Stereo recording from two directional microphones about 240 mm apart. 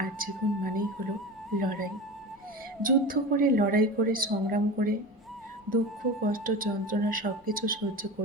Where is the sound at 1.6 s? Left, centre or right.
Right.